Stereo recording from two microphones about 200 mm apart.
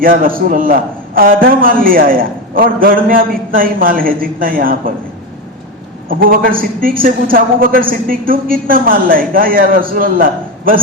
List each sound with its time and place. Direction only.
0.0 s a man's voice: 45° right (ahead or behind)
6.1 s a man's voice: 45° right (ahead or behind)